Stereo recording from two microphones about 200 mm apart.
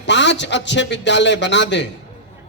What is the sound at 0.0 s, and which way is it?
A man's voice, 60° left (ahead or behind).